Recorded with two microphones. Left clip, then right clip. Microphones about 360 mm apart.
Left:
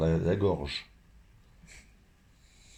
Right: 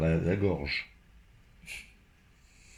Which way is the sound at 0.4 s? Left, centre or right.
Left.